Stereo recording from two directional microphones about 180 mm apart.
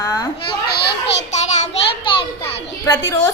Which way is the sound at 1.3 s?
40° left (ahead or behind).